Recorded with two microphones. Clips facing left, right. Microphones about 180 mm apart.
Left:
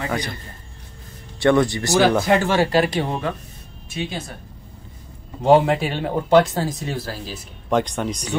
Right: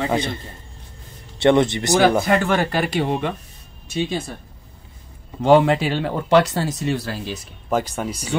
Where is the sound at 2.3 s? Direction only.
55° right (ahead or behind).